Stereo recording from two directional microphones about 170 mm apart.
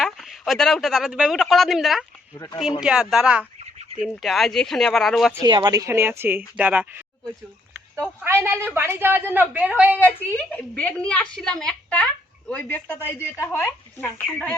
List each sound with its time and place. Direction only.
0.0 s speech: centre (ahead or behind)
2.3 s speech: 20° left (ahead or behind)
2.8 s speech: 5° right (ahead or behind)
5.5 s speech: 25° right (ahead or behind); by 10.0 s 10° right (ahead or behind)
10.0 s a woman's voice: 10° left (ahead or behind)